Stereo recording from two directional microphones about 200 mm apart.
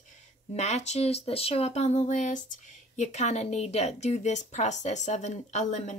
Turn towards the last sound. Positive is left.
turn(degrees=35)  # may be behind; listen again after turning